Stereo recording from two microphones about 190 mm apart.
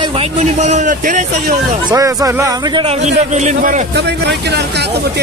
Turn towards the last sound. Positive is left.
turn(degrees=-60)  # may be behind; listen again after turning